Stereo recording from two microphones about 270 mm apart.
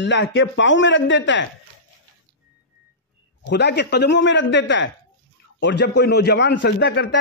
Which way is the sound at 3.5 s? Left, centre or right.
Left.